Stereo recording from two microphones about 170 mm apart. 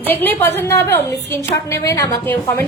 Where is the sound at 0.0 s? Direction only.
10° left (ahead or behind).